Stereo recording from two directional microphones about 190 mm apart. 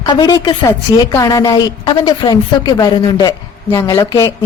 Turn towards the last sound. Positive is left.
turn(degrees=20)  # may be behind; listen again after turning